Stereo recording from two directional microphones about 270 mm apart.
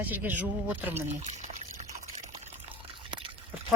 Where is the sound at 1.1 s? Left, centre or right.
Right.